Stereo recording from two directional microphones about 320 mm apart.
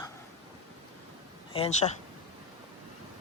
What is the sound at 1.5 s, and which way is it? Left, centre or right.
Speech, centre.